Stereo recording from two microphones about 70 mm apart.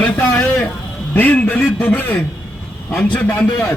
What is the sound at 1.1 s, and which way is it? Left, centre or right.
Speech, left.